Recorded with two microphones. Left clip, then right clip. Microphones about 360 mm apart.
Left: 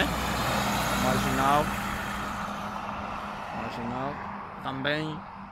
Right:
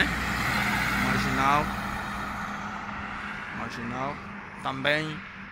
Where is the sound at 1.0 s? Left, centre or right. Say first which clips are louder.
Left 1 dB; centre.